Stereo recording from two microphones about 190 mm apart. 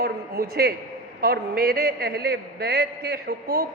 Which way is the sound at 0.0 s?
55° right (ahead or behind).